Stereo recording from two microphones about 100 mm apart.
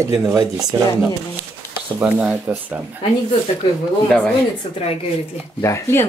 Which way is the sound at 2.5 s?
25° right (ahead or behind).